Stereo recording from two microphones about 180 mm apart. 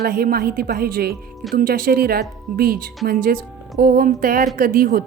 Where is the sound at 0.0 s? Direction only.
55° right (ahead or behind).